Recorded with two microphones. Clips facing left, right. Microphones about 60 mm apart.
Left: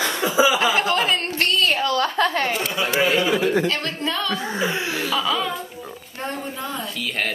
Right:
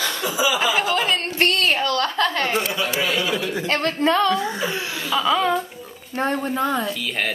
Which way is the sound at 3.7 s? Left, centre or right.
Right.